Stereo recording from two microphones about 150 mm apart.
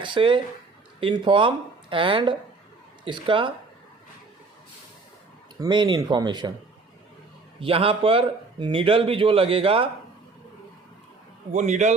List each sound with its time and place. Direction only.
0.0 s a man's voice: 35° right (ahead or behind)
5.5 s speech: 30° right (ahead or behind)
7.6 s a man's voice: 40° right (ahead or behind)
11.5 s a man's voice: 50° right (ahead or behind)